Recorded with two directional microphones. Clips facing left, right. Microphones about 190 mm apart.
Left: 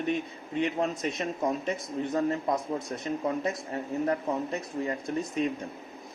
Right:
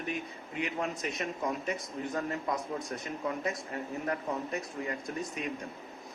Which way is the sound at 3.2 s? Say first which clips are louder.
Left 2 dB; 30° left (ahead or behind).